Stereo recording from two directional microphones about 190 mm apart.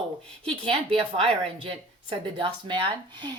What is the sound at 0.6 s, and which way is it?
A woman's voice, 30° right (ahead or behind).